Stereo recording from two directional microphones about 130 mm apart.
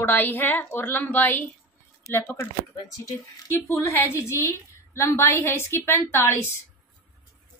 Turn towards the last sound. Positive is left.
turn(degrees=15)  # may be behind; listen again after turning